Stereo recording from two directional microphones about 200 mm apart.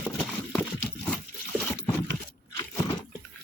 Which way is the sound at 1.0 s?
5° left (ahead or behind).